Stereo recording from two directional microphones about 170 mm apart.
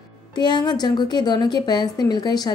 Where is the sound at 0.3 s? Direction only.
25° left (ahead or behind).